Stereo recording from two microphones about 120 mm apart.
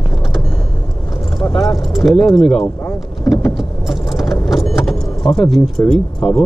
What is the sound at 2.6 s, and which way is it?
Speech, 15° left (ahead or behind).